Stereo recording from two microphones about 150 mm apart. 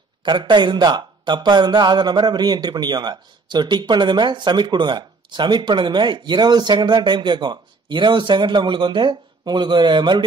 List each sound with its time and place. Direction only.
0.2 s speech: 30° right (ahead or behind)